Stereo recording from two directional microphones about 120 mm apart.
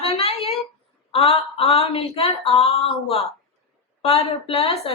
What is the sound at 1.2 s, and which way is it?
A woman's voice, 55° left (ahead or behind).